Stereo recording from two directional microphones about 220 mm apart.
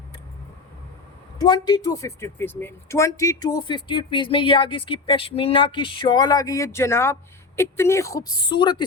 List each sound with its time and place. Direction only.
1.4 s speech: 20° left (ahead or behind)